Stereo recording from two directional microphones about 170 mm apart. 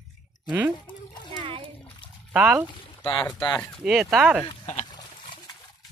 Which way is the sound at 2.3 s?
5° right (ahead or behind).